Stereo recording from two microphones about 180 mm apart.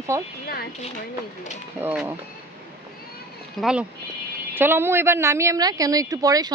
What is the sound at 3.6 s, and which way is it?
Speech, centre (ahead or behind).